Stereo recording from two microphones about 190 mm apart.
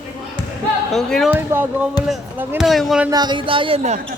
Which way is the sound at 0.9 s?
Centre (ahead or behind).